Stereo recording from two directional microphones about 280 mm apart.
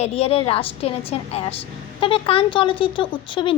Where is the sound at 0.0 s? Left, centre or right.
Left.